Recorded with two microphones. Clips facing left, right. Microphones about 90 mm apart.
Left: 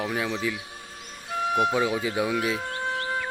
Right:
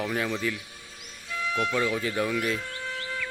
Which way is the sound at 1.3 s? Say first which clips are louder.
Left 4 dB; 50° left (ahead or behind).